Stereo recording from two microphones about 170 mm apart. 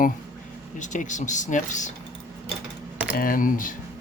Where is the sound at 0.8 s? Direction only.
45° left (ahead or behind).